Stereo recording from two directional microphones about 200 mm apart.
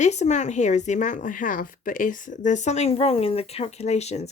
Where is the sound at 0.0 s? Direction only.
35° left (ahead or behind).